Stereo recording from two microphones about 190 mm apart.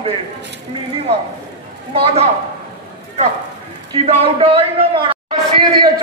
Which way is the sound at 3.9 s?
30° right (ahead or behind).